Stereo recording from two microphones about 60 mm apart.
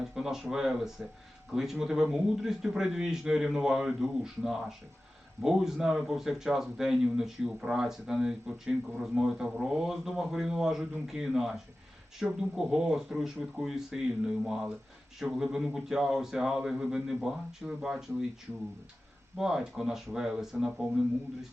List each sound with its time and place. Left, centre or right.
0.1 s speech: centre
19.4 s speech: centre